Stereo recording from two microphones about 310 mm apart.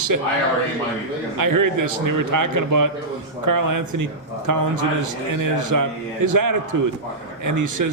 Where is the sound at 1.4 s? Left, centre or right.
Right.